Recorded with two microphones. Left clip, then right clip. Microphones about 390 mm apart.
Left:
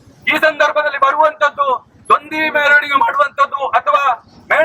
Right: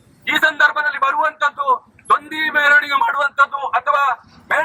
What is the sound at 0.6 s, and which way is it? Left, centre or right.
Speech, centre.